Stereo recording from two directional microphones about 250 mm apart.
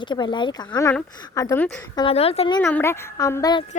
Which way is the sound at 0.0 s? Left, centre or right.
Centre.